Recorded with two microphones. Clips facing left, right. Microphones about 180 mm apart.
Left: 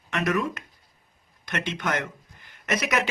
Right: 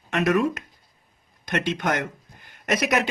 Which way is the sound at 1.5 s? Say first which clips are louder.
Right 4 dB; 50° right (ahead or behind).